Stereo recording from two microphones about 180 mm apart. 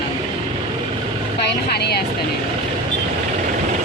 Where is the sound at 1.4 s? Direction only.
65° left (ahead or behind).